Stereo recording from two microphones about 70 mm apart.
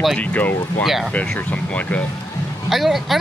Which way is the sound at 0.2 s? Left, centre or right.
Left.